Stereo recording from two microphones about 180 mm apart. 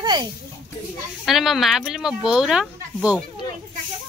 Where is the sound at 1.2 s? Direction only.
Centre (ahead or behind).